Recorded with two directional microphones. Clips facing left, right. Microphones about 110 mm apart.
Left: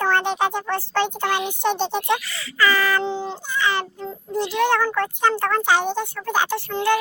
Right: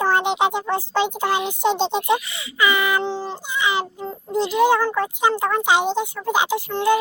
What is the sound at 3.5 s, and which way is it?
A child's voice, 15° right (ahead or behind).